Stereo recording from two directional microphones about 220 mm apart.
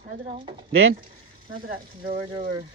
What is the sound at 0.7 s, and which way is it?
Speech, 65° right (ahead or behind).